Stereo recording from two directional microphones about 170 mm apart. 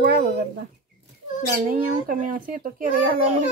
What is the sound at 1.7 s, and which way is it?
Speech, 50° right (ahead or behind).